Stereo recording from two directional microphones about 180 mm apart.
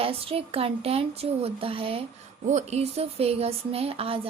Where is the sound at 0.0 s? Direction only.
30° right (ahead or behind).